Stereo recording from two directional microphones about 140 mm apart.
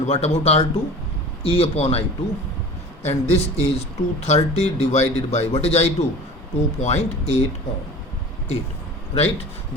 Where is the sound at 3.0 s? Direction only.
50° left (ahead or behind).